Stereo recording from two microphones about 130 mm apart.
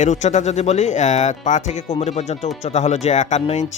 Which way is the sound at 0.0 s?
65° left (ahead or behind).